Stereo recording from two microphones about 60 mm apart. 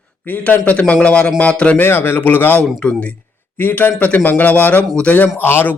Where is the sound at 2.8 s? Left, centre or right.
Centre.